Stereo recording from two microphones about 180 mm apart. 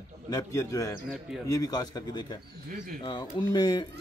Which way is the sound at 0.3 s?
20° left (ahead or behind).